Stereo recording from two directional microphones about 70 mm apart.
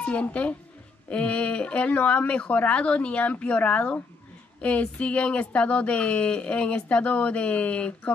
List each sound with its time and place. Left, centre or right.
0.0 s speech: centre